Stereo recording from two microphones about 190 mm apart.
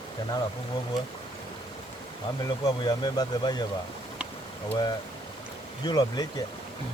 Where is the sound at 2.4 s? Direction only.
20° left (ahead or behind).